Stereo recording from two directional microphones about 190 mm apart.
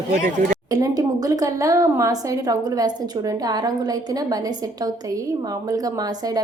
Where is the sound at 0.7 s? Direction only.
20° right (ahead or behind).